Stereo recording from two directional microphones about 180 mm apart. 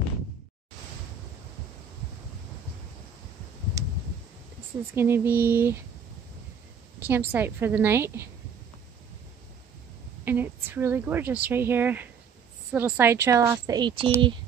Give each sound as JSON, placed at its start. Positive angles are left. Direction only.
{"t": 4.9, "sound": "speech", "side_deg": -15}
{"t": 7.1, "sound": "speech", "side_deg": -10}
{"t": 10.2, "sound": "speech", "side_deg": -10}